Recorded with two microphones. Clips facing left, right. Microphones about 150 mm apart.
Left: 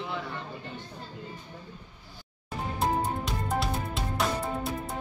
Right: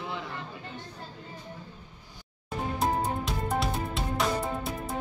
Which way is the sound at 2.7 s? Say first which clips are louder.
Left 1 dB; centre (ahead or behind).